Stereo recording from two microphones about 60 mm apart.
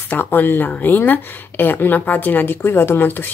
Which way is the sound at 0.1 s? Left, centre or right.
Left.